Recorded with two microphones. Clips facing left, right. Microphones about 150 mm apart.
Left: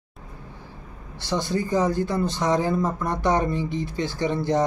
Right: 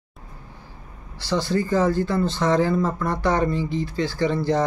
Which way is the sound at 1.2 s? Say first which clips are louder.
Right 2 dB; 20° left (ahead or behind).